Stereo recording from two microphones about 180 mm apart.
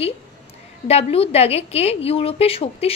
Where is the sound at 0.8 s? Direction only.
35° left (ahead or behind).